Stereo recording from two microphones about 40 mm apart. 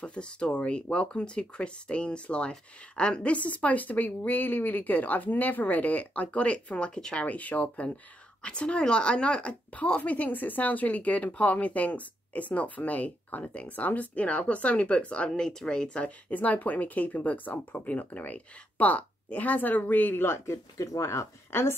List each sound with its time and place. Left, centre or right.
0.0 s speech: left
7.2 s speech: left
8.4 s speech: left
16.0 s speech: left
21.5 s speech: left